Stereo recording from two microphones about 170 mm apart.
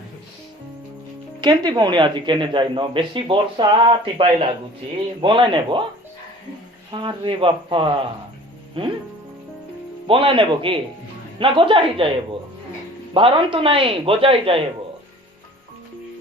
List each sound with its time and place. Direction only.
1.4 s a woman's voice: 25° right (ahead or behind)
6.9 s a woman's voice: 25° right (ahead or behind)
10.1 s speech: 30° right (ahead or behind)
13.1 s speech: 30° right (ahead or behind)